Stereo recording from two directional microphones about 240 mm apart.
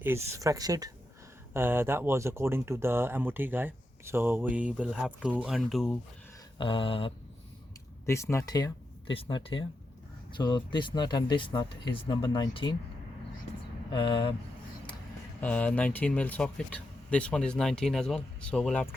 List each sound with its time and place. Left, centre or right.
0.0 s speech: centre
6.6 s speech: left
8.0 s speech: centre
13.9 s speech: centre
15.4 s speech: centre